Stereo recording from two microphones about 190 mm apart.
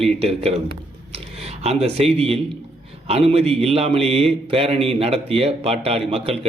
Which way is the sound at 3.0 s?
30° right (ahead or behind).